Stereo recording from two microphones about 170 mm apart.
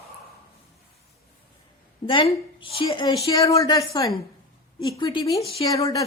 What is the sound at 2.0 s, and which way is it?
A woman's voice, 30° left (ahead or behind).